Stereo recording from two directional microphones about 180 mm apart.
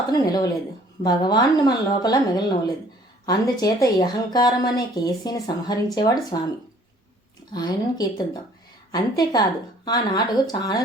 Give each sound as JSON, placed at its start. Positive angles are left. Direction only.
{"t": 0.1, "sound": "a woman's voice", "side_deg": 20}
{"t": 7.5, "sound": "a woman's voice", "side_deg": 20}